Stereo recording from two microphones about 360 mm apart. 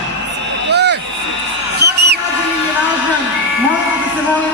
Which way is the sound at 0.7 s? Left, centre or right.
Right.